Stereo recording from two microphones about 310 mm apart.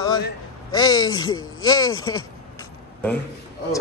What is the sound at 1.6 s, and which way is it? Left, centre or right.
Speech, centre.